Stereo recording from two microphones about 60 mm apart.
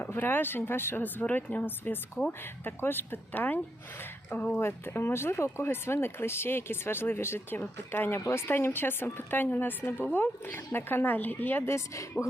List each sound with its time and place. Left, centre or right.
0.0 s speech: left
4.5 s speech: left
12.1 s speech: left